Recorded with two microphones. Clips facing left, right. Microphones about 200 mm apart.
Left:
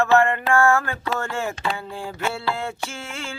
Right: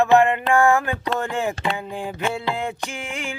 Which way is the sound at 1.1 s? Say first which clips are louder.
Right 2 dB; 15° right (ahead or behind).